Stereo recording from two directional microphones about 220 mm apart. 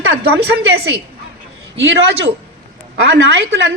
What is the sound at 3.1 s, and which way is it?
Speech, 50° right (ahead or behind).